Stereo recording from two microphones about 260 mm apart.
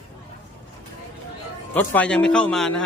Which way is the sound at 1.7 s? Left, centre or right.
Centre.